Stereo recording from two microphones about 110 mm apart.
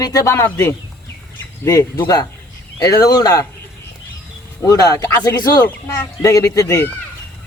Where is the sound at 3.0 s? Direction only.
35° left (ahead or behind).